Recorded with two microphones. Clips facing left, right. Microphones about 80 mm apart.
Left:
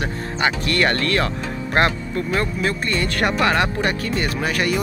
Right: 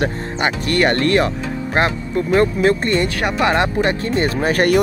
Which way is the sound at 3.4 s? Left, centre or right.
Right.